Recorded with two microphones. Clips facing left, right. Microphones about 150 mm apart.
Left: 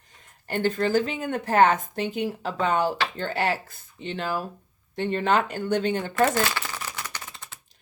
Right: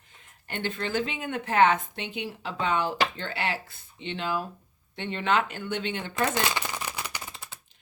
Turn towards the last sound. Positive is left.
turn(degrees=-10)  # may be behind; listen again after turning